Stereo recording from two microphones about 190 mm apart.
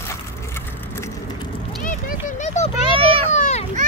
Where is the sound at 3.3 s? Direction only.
40° left (ahead or behind).